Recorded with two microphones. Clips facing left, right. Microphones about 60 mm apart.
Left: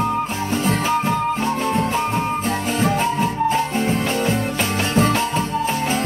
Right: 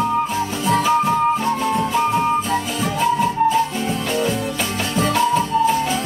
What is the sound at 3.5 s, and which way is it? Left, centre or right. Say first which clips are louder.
Music: even; left.